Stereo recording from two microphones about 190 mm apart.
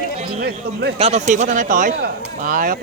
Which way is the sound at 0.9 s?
35° right (ahead or behind).